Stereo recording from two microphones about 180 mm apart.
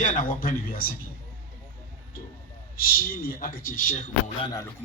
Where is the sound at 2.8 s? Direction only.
55° left (ahead or behind).